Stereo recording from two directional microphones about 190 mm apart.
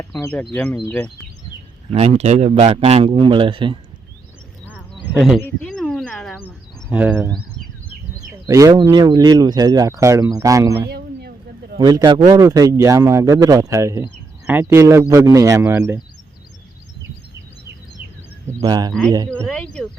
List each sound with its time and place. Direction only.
0.0 s speech: 15° left (ahead or behind)
1.9 s a man's voice: 35° right (ahead or behind)
5.1 s speech: centre (ahead or behind)
5.4 s a sound: 5° left (ahead or behind)
6.9 s a man's voice: 10° right (ahead or behind)
10.8 s a sound: 55° right (ahead or behind)
11.8 s a man's voice: 20° right (ahead or behind)
18.6 s speech: 20° right (ahead or behind)
19.3 s speech: 5° left (ahead or behind)